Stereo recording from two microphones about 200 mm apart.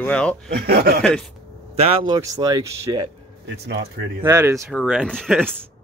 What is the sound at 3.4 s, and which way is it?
Speech, 55° right (ahead or behind).